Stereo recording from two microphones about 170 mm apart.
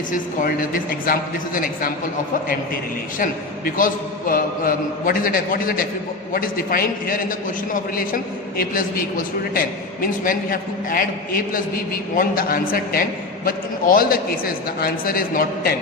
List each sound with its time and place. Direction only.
0.1 s a man's voice: 55° left (ahead or behind)
4.3 s a man's voice: 55° left (ahead or behind)